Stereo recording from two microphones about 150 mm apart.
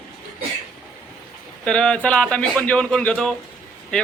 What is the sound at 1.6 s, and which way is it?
A man's voice, 5° left (ahead or behind).